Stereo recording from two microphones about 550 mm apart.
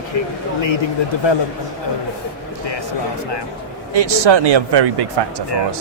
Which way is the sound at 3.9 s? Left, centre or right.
Right.